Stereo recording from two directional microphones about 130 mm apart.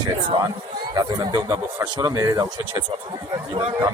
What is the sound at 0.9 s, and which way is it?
Speech, 30° right (ahead or behind).